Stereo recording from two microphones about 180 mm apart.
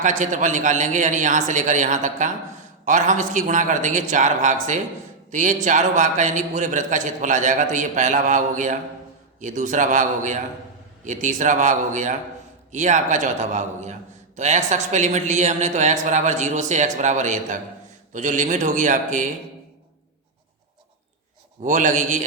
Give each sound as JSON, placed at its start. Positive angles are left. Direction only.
{"t": 0.0, "sound": "a man's voice", "side_deg": -45}
{"t": 21.6, "sound": "a man's voice", "side_deg": -45}